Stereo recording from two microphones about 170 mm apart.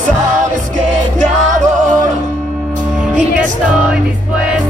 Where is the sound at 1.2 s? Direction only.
50° right (ahead or behind).